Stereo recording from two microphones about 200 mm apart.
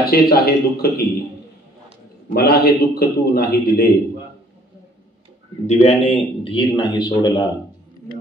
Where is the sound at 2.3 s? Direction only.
50° left (ahead or behind).